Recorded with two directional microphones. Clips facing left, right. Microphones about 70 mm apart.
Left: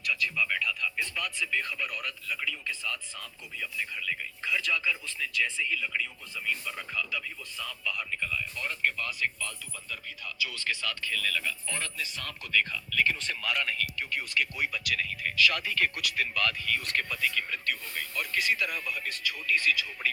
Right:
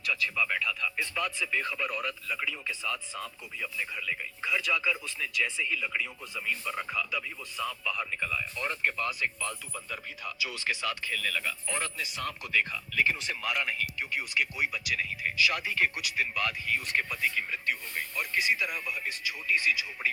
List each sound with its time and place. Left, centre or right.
0.1 s speech: centre
11.7 s speech: centre
17.2 s speech: right
17.5 s speech: centre